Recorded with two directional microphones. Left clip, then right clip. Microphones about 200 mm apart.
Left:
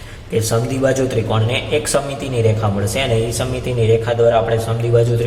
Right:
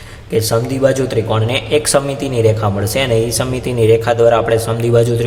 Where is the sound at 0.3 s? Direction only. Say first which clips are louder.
Right 3 dB; 25° right (ahead or behind).